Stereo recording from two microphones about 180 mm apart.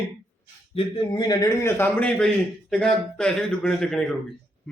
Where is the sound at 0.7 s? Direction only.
25° left (ahead or behind); by 4.2 s centre (ahead or behind).